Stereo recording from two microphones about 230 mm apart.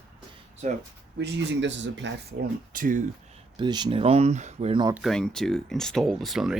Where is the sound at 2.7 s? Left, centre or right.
Right.